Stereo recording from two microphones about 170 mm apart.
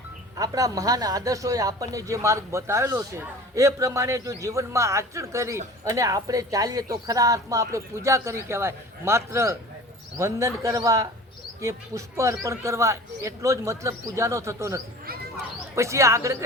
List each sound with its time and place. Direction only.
0.3 s a man's voice: 20° right (ahead or behind)